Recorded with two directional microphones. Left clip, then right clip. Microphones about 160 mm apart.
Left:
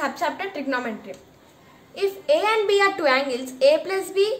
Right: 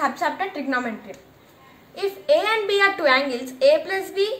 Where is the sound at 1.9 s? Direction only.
45° left (ahead or behind).